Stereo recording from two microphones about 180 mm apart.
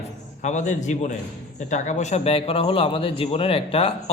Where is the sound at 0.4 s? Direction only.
40° left (ahead or behind).